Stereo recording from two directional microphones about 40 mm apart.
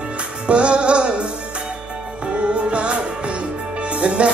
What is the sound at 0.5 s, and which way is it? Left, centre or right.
Music, right.